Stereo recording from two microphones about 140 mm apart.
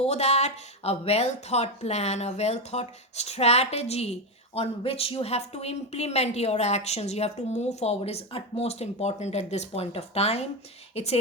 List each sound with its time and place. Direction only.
0.0 s speech: 50° left (ahead or behind)